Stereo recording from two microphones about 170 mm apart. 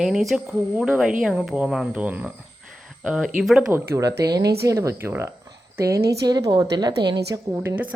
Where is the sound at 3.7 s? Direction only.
20° right (ahead or behind).